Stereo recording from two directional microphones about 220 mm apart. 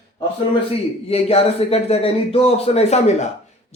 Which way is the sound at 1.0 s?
25° left (ahead or behind).